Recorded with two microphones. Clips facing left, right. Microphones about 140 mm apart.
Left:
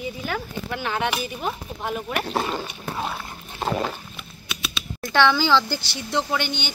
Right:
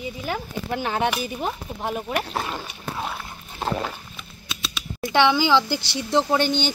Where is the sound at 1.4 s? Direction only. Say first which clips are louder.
Right 1 dB; 20° right (ahead or behind).